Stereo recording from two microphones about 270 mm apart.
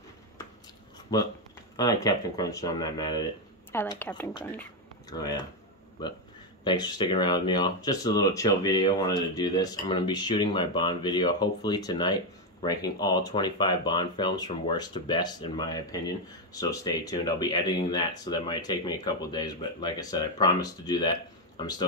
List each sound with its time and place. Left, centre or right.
1.1 s speech: centre